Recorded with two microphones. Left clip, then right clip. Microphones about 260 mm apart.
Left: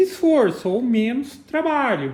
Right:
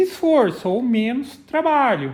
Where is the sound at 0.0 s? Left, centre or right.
Right.